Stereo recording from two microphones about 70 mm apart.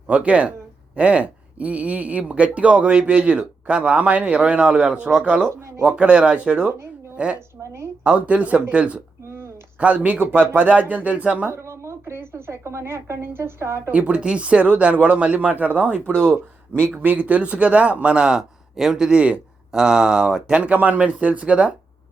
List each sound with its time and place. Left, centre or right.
0.1 s speech: centre
5.5 s speech: right
5.8 s speech: centre
11.5 s a woman's voice: right
13.9 s speech: centre